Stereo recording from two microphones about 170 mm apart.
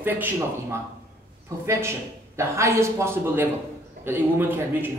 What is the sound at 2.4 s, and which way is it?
A man's voice, 15° right (ahead or behind).